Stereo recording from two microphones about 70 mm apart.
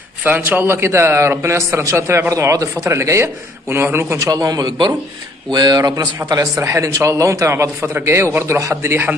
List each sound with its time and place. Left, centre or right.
0.2 s a man's voice: right
4.2 s a man's voice: right
6.6 s a man's voice: right